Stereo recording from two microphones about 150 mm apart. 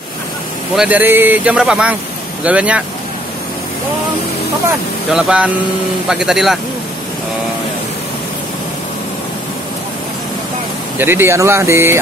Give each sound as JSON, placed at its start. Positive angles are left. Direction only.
{"t": 0.7, "sound": "speech", "side_deg": -10}
{"t": 5.1, "sound": "speech", "side_deg": -5}
{"t": 11.0, "sound": "speech", "side_deg": -15}